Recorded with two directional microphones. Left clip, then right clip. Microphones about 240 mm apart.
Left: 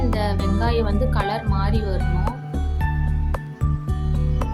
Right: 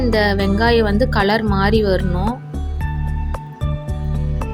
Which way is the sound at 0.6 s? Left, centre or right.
Right.